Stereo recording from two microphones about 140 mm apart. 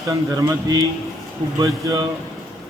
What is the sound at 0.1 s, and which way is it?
Speech, 25° right (ahead or behind).